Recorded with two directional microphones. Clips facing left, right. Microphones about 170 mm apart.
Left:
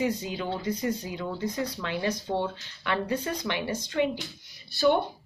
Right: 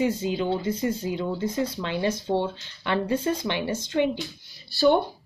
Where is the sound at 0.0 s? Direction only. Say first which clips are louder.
Right 4 dB; 25° right (ahead or behind).